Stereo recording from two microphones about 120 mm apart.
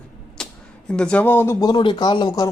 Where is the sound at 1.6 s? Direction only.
40° left (ahead or behind).